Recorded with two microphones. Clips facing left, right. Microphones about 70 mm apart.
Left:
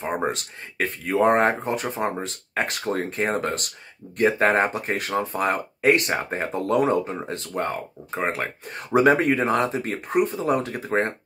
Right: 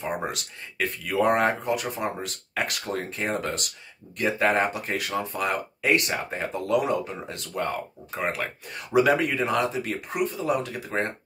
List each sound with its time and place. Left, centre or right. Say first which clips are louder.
0.0 s speech: left 4 dB; left